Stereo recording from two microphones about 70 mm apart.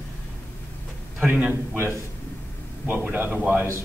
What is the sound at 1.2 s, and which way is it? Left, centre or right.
A man's voice, right.